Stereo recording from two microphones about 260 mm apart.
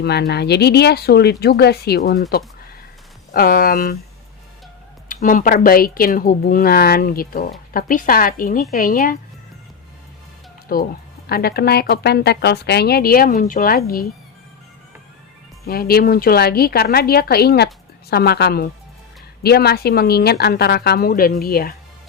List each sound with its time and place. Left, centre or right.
0.0 s a woman's voice: left
3.3 s a woman's voice: left
5.0 s a woman's voice: left
10.7 s a woman's voice: left
15.6 s a woman's voice: left